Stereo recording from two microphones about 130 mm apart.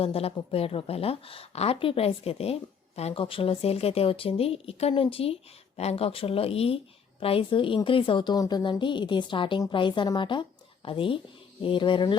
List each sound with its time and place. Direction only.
0.0 s a woman's voice: 50° left (ahead or behind)